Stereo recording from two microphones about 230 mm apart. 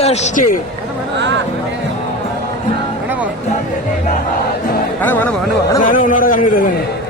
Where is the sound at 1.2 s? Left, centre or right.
Right.